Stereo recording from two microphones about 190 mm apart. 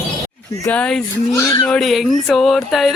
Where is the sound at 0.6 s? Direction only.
5° left (ahead or behind).